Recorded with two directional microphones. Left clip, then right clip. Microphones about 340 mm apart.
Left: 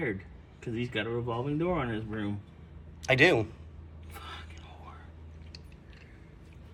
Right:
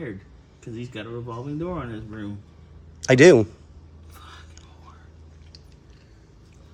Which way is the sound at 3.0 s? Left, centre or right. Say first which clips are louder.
Right 10 dB; right.